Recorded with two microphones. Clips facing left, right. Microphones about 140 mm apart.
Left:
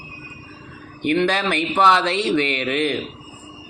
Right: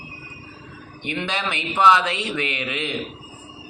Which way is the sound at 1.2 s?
45° left (ahead or behind).